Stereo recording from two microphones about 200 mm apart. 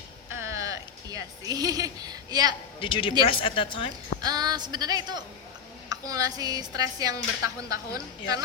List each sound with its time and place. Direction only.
0.3 s a sound: 10° right (ahead or behind)
2.8 s a woman's voice: 25° left (ahead or behind)
4.2 s a woman's voice: 20° right (ahead or behind)